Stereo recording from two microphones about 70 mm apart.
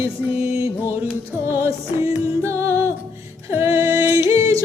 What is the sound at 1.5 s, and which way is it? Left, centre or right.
Music, right.